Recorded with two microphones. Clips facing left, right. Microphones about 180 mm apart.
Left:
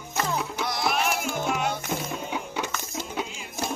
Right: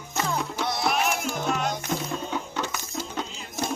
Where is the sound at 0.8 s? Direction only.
Centre (ahead or behind).